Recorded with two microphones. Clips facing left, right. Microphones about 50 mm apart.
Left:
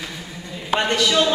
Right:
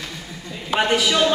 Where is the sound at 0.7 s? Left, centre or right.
Centre.